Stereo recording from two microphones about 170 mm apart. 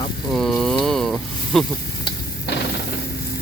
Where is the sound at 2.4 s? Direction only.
80° left.